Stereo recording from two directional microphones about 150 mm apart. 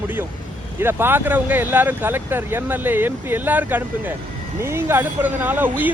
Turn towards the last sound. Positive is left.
turn(degrees=-10)  # may be behind; listen again after turning